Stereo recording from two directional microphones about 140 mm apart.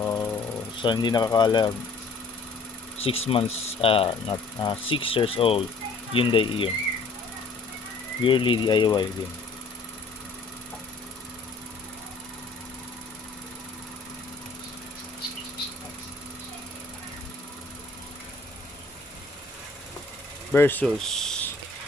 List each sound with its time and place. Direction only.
0.0 s a sound: 20° left (ahead or behind)
0.8 s speech: 30° left (ahead or behind)
3.0 s speech: 45° left (ahead or behind)
8.2 s speech: 40° left (ahead or behind)
20.5 s speech: 15° left (ahead or behind)
20.8 s speech: 5° left (ahead or behind)